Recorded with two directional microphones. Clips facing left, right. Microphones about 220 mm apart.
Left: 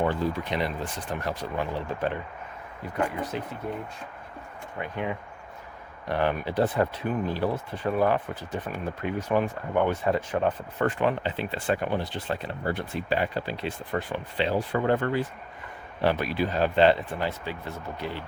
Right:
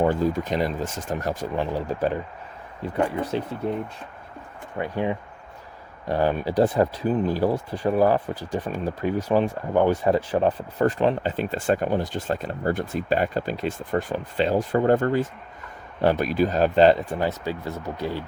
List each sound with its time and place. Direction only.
0.0 s speech: 45° right (ahead or behind)
2.8 s speech: 30° right (ahead or behind)
4.8 s speech: 30° right (ahead or behind)